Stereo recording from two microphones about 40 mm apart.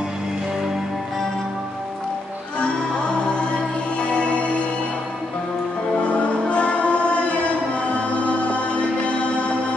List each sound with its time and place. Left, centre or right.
2.6 s music: left
6.0 s music: left